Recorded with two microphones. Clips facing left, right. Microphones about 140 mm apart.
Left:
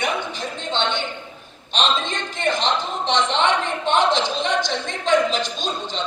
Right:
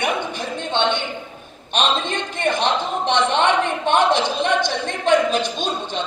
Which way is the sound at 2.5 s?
55° right (ahead or behind).